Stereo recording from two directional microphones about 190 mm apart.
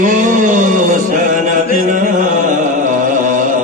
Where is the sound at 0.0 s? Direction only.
45° right (ahead or behind).